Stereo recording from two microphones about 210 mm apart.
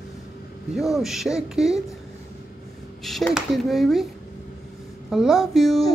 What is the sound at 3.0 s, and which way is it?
Speech, centre (ahead or behind).